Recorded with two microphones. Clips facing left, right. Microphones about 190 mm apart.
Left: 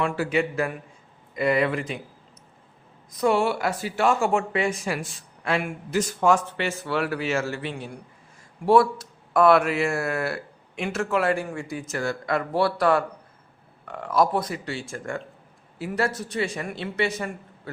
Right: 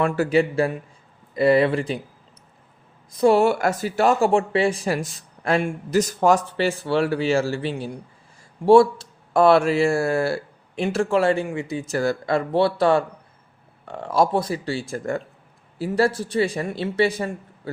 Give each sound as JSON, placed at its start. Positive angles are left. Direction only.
{"t": 0.0, "sound": "speech", "side_deg": -40}
{"t": 3.1, "sound": "speech", "side_deg": -30}